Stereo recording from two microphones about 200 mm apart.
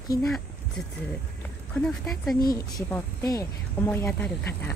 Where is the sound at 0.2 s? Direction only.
Centre (ahead or behind).